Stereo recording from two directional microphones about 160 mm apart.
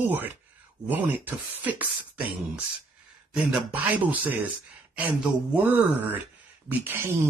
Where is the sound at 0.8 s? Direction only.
10° right (ahead or behind).